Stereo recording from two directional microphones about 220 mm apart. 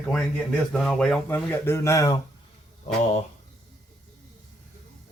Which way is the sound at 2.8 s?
30° left (ahead or behind).